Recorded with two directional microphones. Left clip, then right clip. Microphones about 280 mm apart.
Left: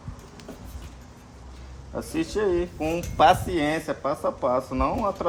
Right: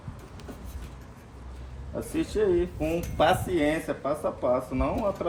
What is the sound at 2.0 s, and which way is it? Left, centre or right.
Speech, left.